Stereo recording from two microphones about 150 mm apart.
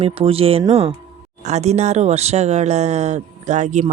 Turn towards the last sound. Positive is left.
turn(degrees=-50)  # may be behind; listen again after turning